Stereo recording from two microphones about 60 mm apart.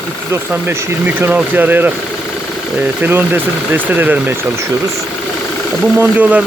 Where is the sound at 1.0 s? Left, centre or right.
Right.